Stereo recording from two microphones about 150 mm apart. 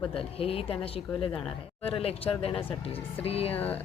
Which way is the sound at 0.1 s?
40° left (ahead or behind).